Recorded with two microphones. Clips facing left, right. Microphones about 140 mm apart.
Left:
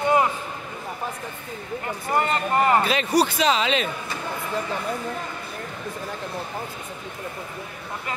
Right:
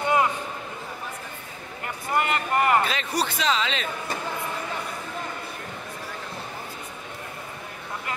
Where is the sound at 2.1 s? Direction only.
25° left (ahead or behind).